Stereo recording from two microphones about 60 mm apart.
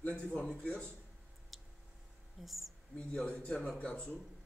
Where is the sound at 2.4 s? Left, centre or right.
Centre.